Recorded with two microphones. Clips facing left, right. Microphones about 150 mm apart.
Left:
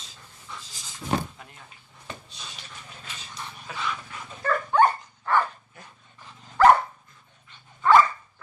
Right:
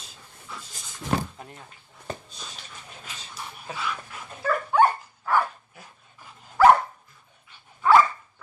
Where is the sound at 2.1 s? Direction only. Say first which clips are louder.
Right 5 dB; 40° right (ahead or behind).